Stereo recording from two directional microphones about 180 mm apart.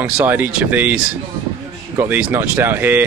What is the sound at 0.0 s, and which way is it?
Speech, 10° right (ahead or behind).